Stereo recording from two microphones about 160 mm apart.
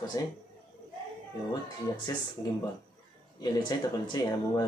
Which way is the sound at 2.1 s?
20° left (ahead or behind).